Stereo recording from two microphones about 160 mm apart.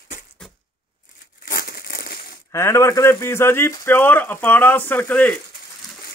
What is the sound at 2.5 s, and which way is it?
Speech, 15° left (ahead or behind).